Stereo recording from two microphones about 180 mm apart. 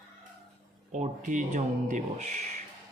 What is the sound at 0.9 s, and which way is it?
A man's voice, 40° right (ahead or behind).